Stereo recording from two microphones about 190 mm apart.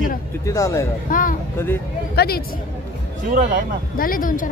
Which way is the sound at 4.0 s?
45° left (ahead or behind).